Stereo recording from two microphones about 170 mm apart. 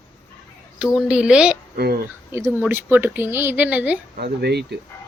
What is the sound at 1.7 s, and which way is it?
Speech, 65° right (ahead or behind).